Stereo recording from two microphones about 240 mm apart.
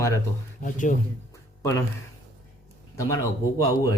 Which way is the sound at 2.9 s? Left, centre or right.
Centre.